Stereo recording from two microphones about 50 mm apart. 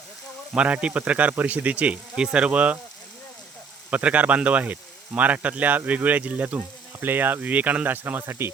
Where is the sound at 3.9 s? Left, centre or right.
Right.